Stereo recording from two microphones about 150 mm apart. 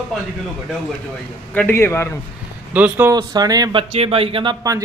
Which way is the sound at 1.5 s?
15° left (ahead or behind).